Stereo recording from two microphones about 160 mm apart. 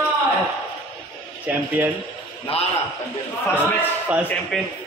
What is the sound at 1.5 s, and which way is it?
Speech, 10° right (ahead or behind).